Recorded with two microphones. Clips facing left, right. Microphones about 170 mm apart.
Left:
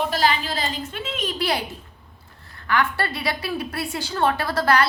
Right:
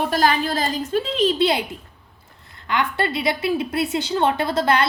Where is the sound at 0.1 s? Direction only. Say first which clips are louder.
Right 3 dB; 50° right (ahead or behind); by 1.6 s 25° right (ahead or behind).